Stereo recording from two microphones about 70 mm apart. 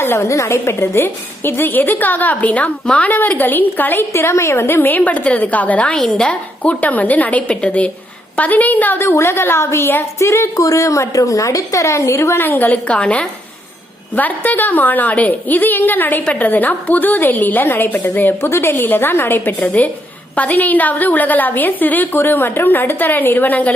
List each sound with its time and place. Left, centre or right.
0.0 s a woman's voice: left
4.1 s a woman's voice: left
12.4 s a woman's voice: left